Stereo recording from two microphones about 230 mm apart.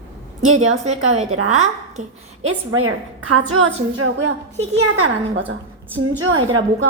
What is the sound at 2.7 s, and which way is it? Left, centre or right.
A woman's voice, right.